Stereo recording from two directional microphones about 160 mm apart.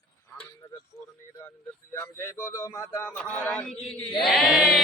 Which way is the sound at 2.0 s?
15° left (ahead or behind).